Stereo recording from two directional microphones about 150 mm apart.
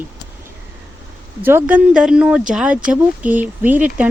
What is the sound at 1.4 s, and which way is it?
Speech, 15° right (ahead or behind).